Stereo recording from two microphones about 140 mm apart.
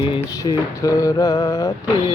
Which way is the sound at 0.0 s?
30° left (ahead or behind).